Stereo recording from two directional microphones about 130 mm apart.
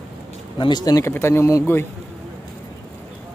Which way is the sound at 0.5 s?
35° left (ahead or behind).